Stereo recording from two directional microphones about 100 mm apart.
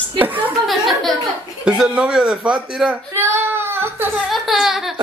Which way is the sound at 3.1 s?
25° right (ahead or behind).